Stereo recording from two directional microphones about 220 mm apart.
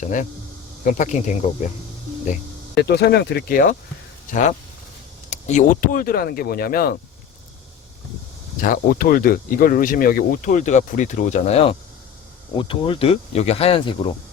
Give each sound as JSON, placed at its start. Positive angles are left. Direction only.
{"t": 0.0, "sound": "speech", "side_deg": 35}
{"t": 2.7, "sound": "speech", "side_deg": 50}
{"t": 5.3, "sound": "speech", "side_deg": 30}
{"t": 8.6, "sound": "speech", "side_deg": 40}